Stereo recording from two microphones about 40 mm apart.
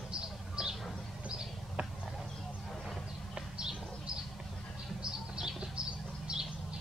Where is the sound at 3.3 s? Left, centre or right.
Centre.